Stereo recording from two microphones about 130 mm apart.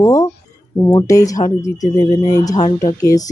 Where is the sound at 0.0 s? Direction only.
25° left (ahead or behind).